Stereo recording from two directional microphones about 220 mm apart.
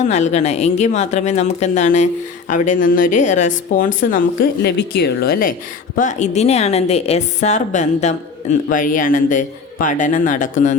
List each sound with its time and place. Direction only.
0.0 s a woman's voice: 30° left (ahead or behind)